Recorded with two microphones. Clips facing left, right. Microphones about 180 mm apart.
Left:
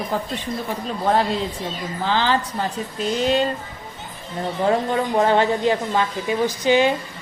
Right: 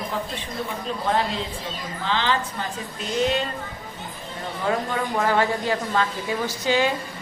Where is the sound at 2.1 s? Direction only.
35° left (ahead or behind).